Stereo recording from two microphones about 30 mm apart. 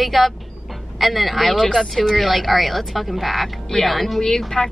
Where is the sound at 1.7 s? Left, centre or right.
Centre.